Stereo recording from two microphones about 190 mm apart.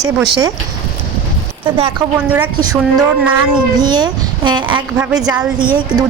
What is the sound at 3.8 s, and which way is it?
Speech, 20° right (ahead or behind).